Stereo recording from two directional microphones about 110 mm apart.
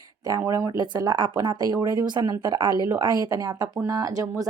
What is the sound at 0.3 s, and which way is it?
Speech, 30° right (ahead or behind).